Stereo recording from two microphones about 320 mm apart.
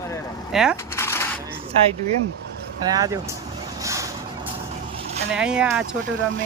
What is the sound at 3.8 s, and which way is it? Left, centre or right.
Vehicle, centre.